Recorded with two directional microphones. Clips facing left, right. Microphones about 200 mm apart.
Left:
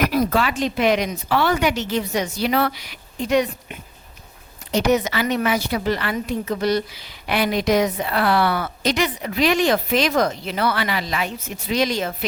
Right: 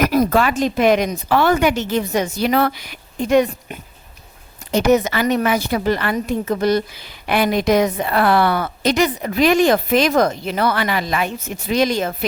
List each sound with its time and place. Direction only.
0.0 s a woman's voice: 45° right (ahead or behind)